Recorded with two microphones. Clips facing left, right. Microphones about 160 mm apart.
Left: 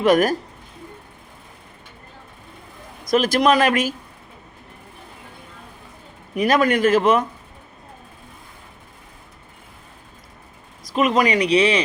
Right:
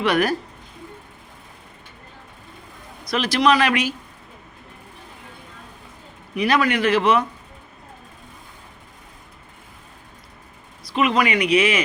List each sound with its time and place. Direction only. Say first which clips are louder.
0.0 s speech: left 4 dB; 45° left (ahead or behind)
3.0 s speech: left 3 dB; 45° left (ahead or behind)
6.3 s speech: left 2 dB; 45° left (ahead or behind)
10.8 s speech: left 2 dB; 45° left (ahead or behind)